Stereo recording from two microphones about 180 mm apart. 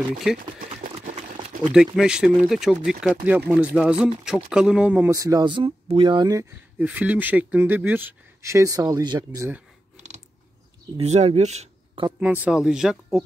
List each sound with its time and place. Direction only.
0.4 s speech: 50° right (ahead or behind)
0.9 s a sound: 40° right (ahead or behind)
2.0 s speech: 5° right (ahead or behind); by 6.4 s 25° right (ahead or behind)
6.8 s speech: 10° right (ahead or behind)
9.9 s mechanisms: 40° right (ahead or behind)
11.0 s speech: 35° right (ahead or behind)
12.2 s speech: 10° right (ahead or behind)